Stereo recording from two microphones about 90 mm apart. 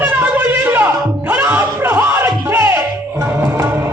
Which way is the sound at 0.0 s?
20° right (ahead or behind).